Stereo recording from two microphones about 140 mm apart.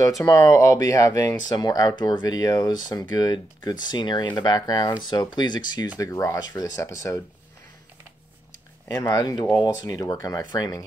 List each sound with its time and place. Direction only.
0.2 s speech: 20° left (ahead or behind)
8.8 s speech: 25° left (ahead or behind)